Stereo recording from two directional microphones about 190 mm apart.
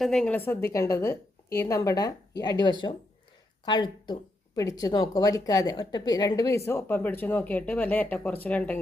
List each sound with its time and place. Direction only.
0.0 s a woman's voice: centre (ahead or behind)